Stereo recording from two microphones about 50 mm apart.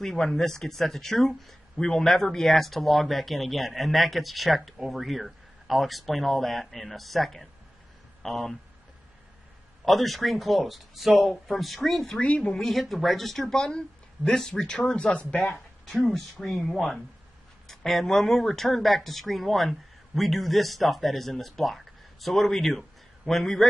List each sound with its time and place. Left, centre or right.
0.0 s speech: centre
9.8 s speech: centre
12.2 s speech: left
12.5 s speech: centre
16.1 s speech: centre